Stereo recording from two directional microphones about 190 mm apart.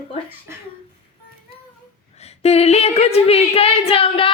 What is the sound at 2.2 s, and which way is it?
Speech, 35° left (ahead or behind).